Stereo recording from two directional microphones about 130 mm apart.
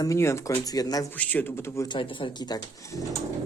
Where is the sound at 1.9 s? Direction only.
40° left (ahead or behind).